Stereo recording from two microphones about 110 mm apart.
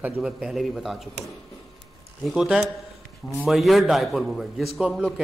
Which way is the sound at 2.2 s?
5° right (ahead or behind).